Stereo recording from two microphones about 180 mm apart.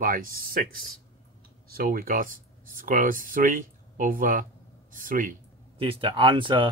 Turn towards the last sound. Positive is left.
turn(degrees=-25)  # may be behind; listen again after turning